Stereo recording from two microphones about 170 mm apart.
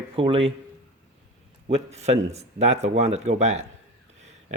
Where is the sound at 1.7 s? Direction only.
35° right (ahead or behind).